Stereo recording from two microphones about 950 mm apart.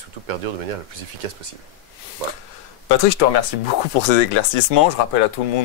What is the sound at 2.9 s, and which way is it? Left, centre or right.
Speech, left.